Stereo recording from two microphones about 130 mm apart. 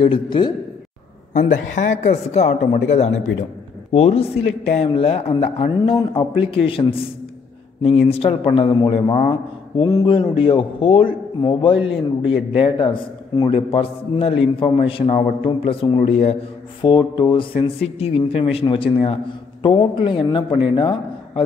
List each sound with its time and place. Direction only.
0.0 s a man's voice: 40° left (ahead or behind)
1.3 s a man's voice: 75° left (ahead or behind); by 7.1 s 45° left (ahead or behind)
8.1 s a man's voice: 45° left (ahead or behind)
9.8 s speech: 25° left (ahead or behind)
10.4 s a man's voice: 40° left (ahead or behind)
16.8 s a man's voice: 35° left (ahead or behind)